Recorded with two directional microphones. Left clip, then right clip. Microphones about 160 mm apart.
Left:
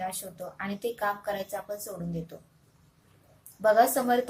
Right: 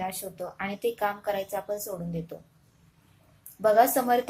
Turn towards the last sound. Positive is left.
turn(degrees=-15)  # may be behind; listen again after turning